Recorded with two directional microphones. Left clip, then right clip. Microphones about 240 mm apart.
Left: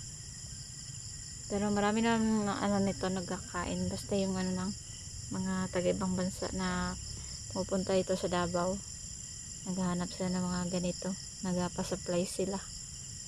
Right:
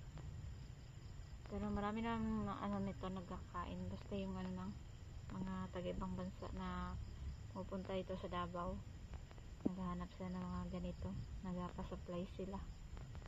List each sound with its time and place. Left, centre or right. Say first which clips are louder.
1.5 s speech: left 13 dB; left
5.5 s cricket: left 15 dB; left
7.5 s speech: left 15 dB; left
9.8 s cricket: left 13 dB; left